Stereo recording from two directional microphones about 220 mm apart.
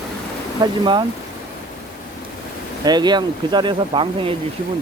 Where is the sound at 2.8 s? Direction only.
20° right (ahead or behind).